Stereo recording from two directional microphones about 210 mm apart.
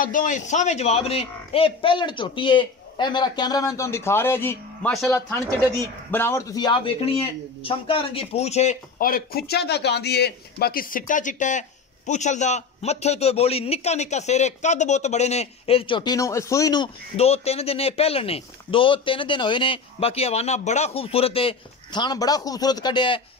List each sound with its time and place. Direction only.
0.0 s a man's voice: 40° left (ahead or behind); by 4.9 s 10° left (ahead or behind)
6.1 s a man's voice: 10° left (ahead or behind)